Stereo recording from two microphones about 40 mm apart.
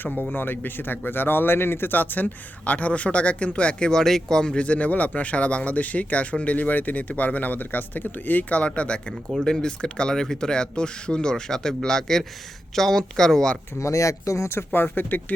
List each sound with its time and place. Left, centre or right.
0.0 s speech: left
1.9 s speech: left
3.9 s speech: centre
4.6 s speech: left
9.3 s speech: centre
14.5 s speech: left